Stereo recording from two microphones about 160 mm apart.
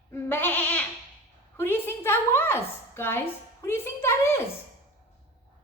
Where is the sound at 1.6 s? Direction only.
15° left (ahead or behind).